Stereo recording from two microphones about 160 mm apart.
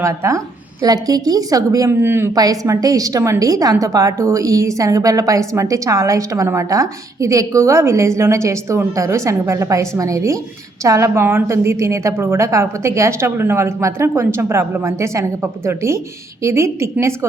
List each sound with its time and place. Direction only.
0.0 s a woman's voice: 20° right (ahead or behind)